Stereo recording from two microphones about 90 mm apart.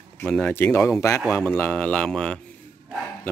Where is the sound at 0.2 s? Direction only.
15° left (ahead or behind).